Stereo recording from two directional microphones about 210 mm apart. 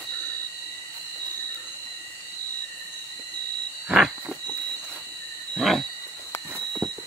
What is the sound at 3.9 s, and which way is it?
Frog, 5° right (ahead or behind).